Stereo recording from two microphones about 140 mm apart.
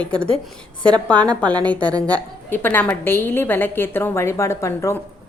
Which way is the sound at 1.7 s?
10° left (ahead or behind).